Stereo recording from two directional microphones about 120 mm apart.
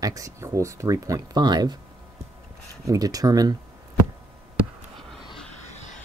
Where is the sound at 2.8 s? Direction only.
30° right (ahead or behind).